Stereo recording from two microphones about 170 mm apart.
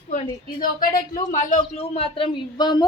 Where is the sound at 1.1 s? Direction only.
50° left (ahead or behind); by 2.8 s 25° left (ahead or behind).